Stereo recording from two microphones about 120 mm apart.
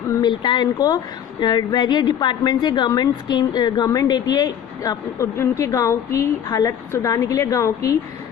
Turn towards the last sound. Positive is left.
turn(degrees=25)  # may be behind; listen again after turning